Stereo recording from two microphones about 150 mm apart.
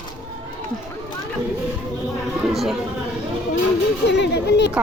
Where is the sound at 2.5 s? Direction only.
Centre (ahead or behind).